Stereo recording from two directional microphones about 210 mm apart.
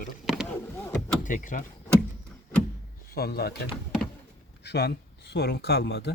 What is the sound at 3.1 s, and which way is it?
Speech, 50° left (ahead or behind).